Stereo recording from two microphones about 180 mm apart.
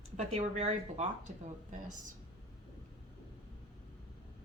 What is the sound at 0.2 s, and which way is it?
Speech, 40° right (ahead or behind).